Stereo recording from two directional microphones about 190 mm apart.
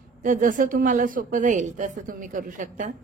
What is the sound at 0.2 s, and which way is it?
A woman's voice, 45° right (ahead or behind).